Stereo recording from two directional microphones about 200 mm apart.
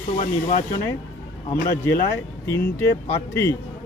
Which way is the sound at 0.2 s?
40° left (ahead or behind).